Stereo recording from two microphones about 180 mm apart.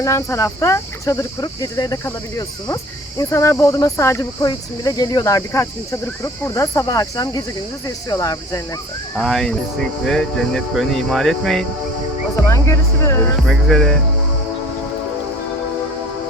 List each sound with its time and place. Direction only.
0.0 s speech: 15° left (ahead or behind)
3.2 s speech: 15° left (ahead or behind)
9.1 s speech: centre (ahead or behind)
12.5 s speech: 15° left (ahead or behind)
13.5 s speech: centre (ahead or behind)